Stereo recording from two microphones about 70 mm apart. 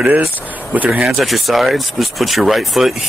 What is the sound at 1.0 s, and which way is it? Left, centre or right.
Speech, centre.